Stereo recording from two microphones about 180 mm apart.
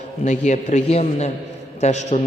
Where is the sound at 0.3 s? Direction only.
40° left (ahead or behind).